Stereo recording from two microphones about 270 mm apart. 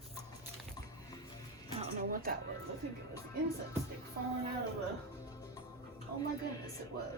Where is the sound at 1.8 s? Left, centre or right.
Right.